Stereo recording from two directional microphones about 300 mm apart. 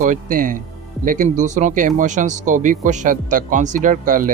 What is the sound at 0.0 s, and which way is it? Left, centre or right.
Speech, right.